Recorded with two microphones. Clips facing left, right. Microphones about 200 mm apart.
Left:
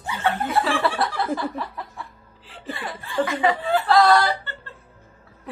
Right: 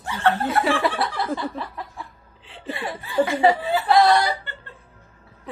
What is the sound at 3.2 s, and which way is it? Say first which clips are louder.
Speech: right 4 dB; 30° right (ahead or behind).